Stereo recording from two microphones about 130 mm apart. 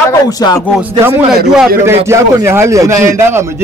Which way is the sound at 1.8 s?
20° right (ahead or behind).